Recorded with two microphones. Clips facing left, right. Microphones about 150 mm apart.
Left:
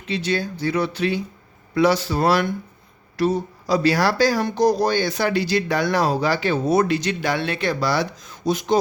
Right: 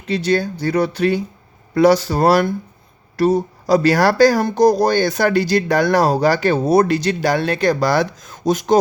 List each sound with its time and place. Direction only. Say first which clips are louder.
0.1 s speech: right 6 dB; 45° right (ahead or behind)